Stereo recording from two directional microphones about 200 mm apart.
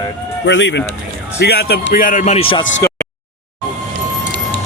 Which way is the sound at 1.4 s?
55° left (ahead or behind).